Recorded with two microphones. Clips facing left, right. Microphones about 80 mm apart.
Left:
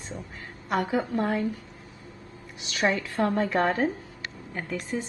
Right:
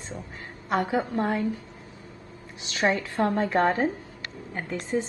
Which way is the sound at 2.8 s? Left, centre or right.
Right.